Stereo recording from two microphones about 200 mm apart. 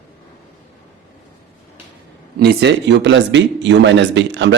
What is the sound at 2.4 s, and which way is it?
Speech, 55° right (ahead or behind).